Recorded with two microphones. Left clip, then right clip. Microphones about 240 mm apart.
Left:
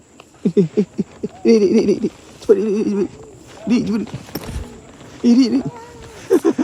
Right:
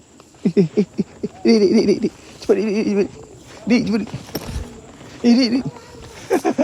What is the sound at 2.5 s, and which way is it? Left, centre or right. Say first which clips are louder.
Speech: left 2 dB; left.